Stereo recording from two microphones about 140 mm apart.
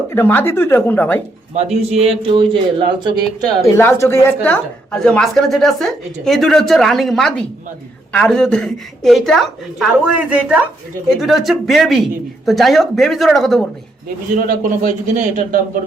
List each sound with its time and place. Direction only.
0.1 s speech: 15° left (ahead or behind)
1.5 s a man's voice: 50° right (ahead or behind); by 3.2 s 30° right (ahead or behind)
3.8 s a woman's voice: 20° left (ahead or behind); by 13.7 s centre (ahead or behind)
14.3 s a man's voice: 70° right (ahead or behind)